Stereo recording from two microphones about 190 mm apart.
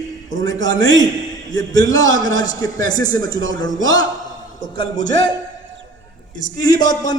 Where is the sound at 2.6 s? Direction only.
90° right.